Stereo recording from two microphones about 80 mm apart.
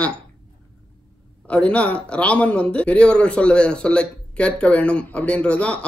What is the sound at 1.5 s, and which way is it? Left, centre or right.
Speech, centre.